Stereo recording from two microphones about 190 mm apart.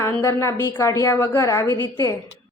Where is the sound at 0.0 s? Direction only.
15° left (ahead or behind).